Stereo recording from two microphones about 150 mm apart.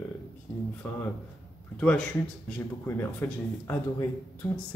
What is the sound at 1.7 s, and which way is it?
Speech, 5° left (ahead or behind).